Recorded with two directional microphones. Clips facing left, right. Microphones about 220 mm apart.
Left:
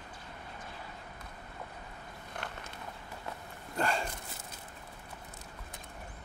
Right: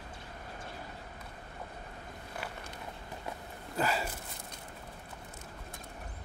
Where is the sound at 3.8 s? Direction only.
5° right (ahead or behind).